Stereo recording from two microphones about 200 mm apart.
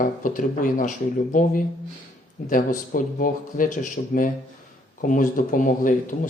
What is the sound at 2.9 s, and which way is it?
Speech, 45° left (ahead or behind).